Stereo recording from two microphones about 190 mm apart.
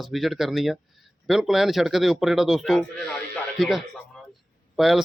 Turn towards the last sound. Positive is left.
turn(degrees=0)  # may be behind; listen again after turning